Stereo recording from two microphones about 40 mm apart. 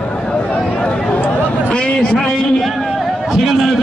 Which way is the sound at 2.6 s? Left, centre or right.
Centre.